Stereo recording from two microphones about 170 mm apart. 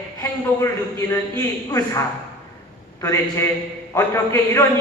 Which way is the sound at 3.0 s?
15° left (ahead or behind).